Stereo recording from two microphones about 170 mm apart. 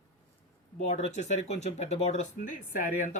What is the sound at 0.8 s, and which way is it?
Speech, 40° left (ahead or behind).